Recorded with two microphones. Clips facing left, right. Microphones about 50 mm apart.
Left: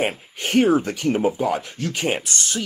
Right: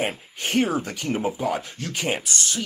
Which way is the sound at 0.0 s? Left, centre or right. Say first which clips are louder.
Left 3 dB; left.